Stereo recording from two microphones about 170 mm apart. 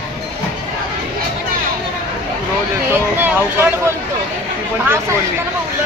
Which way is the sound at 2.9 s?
10° right (ahead or behind).